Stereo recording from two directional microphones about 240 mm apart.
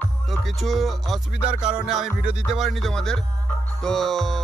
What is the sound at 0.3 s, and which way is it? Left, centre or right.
Speech, centre.